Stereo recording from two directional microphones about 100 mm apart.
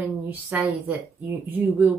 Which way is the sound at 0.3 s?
15° right (ahead or behind).